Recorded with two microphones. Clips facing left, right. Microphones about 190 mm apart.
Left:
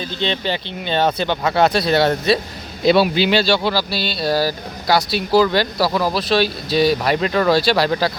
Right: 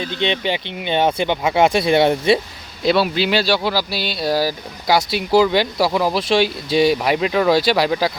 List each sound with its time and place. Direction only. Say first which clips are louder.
0.2 s speech: right 1 dB; 15° right (ahead or behind)
2.8 s speech: left 3 dB; centre (ahead or behind)